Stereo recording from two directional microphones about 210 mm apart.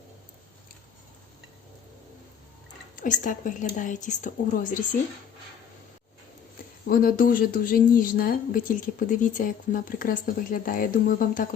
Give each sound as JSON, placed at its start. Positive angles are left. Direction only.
{"t": 2.9, "sound": "a woman's voice", "side_deg": 40}
{"t": 6.8, "sound": "a woman's voice", "side_deg": 45}